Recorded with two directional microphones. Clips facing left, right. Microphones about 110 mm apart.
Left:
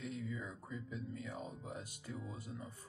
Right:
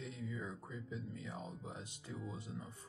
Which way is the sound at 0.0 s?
30° right (ahead or behind).